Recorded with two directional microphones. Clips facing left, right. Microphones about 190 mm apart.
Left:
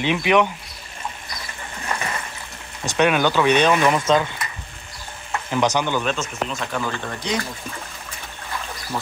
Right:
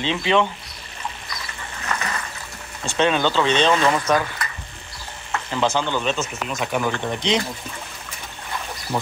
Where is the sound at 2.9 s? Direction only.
10° left (ahead or behind).